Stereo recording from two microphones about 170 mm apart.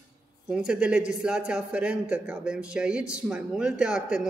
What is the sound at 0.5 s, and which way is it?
Speech, 5° right (ahead or behind).